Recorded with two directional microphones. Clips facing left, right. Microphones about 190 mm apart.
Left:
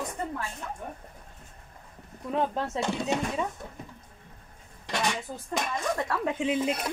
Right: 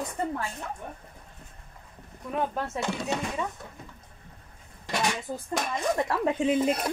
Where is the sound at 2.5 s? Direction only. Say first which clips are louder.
Left 1 dB; 20° left (ahead or behind).